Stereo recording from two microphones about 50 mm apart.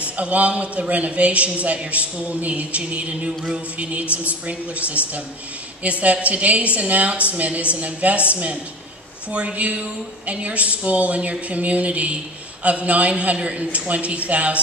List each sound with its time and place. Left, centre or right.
0.2 s a man's voice: right
3.7 s a man's voice: right